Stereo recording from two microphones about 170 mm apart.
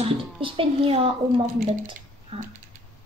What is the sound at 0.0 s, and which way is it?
A woman's voice, 30° right (ahead or behind).